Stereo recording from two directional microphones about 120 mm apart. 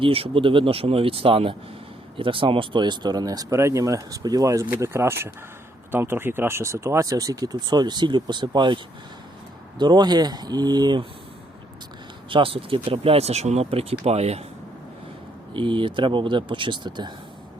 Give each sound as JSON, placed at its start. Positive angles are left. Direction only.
{"t": 0.0, "sound": "speech", "side_deg": -50}
{"t": 12.3, "sound": "speech", "side_deg": -50}
{"t": 15.5, "sound": "speech", "side_deg": -45}